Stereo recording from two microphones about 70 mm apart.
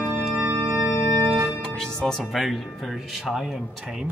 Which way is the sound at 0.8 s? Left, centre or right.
Left.